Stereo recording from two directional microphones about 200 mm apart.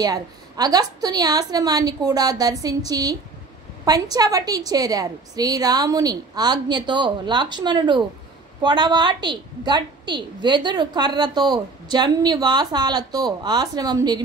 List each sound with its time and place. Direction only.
0.0 s a woman's voice: 20° right (ahead or behind)